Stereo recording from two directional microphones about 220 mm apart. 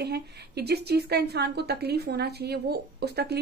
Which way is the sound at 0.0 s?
45° right (ahead or behind).